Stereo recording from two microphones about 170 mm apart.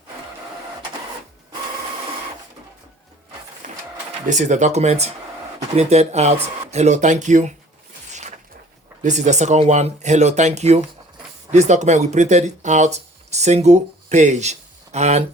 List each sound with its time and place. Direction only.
3.6 s a sound: 50° right (ahead or behind)
4.3 s speech: 45° right (ahead or behind)
9.0 s speech: 45° right (ahead or behind)